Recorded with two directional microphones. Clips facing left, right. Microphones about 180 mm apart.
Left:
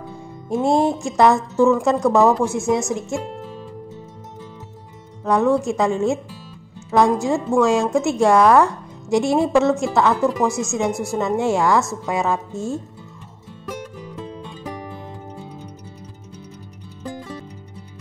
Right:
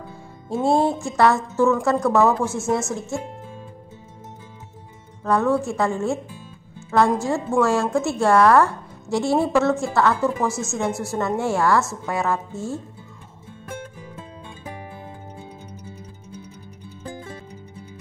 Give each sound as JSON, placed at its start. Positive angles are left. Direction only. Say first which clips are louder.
{"t": 0.7, "sound": "a woman's voice", "louder": "left 1 dB", "side_deg": 15}
{"t": 5.2, "sound": "a woman's voice", "louder": "left 3 dB", "side_deg": 15}